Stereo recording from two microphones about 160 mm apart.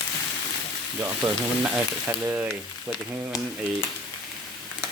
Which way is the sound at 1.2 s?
25° right (ahead or behind).